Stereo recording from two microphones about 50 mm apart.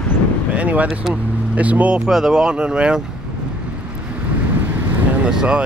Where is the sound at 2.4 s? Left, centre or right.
Centre.